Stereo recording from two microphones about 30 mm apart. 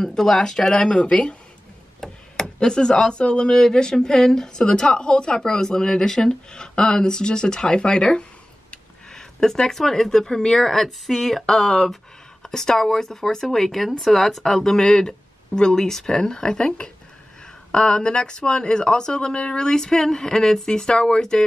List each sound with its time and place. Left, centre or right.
0.1 s speech: centre
0.8 s speech: left
2.0 s chop: centre
2.6 s speech: left
3.5 s speech: left
11.1 s speech: centre
11.5 s speech: centre